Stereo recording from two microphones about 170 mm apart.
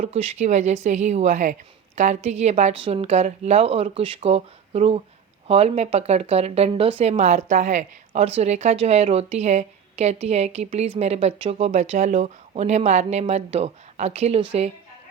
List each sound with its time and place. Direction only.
0.0 s speech: 40° right (ahead or behind)